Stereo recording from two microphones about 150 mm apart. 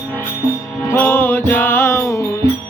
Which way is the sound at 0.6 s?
15° left (ahead or behind).